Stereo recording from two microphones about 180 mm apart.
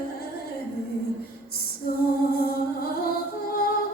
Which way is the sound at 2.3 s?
55° left (ahead or behind).